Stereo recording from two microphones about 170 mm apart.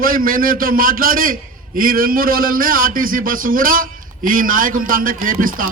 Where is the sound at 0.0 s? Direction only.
55° right (ahead or behind).